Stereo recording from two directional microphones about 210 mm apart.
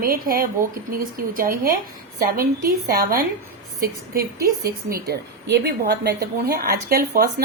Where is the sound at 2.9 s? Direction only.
45° right (ahead or behind).